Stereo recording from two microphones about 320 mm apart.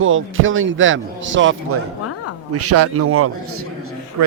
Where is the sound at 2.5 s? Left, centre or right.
Right.